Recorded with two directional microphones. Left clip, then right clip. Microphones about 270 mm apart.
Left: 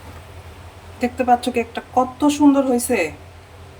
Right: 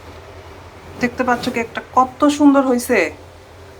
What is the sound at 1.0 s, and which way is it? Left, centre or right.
A woman's voice, centre.